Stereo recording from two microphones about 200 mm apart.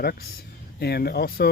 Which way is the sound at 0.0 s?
50° left (ahead or behind).